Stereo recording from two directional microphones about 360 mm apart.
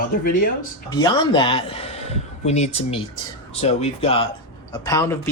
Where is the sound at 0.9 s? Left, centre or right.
Centre.